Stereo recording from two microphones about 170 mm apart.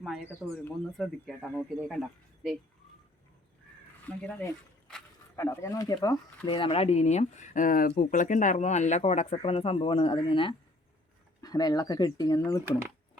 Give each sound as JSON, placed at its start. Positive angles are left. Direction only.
{"t": 0.0, "sound": "speech", "side_deg": 0}
{"t": 4.0, "sound": "speech", "side_deg": 10}